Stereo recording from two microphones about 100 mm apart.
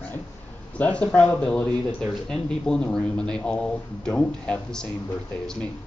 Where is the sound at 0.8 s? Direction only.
15° left (ahead or behind).